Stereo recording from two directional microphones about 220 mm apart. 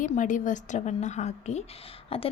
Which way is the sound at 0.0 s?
35° left (ahead or behind).